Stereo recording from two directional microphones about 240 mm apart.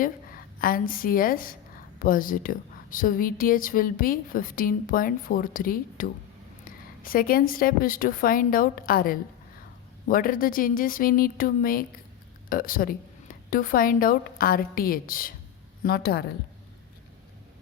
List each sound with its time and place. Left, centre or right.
0.0 s a woman's voice: left